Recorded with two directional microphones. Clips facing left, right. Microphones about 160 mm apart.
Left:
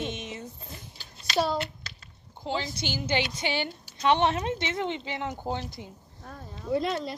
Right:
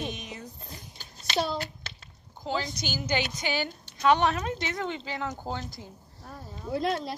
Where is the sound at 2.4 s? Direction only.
25° left (ahead or behind).